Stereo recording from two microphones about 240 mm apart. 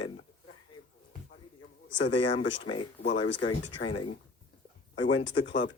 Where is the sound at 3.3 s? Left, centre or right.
Left.